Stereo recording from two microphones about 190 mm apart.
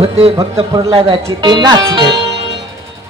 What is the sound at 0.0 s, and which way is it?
Speech, 30° right (ahead or behind).